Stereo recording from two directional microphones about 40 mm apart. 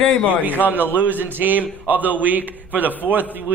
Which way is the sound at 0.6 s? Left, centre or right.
Right.